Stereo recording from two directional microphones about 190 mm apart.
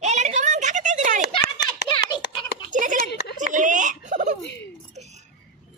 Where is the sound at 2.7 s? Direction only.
45° right (ahead or behind).